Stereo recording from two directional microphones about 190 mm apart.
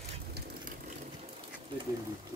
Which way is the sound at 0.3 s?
45° right (ahead or behind).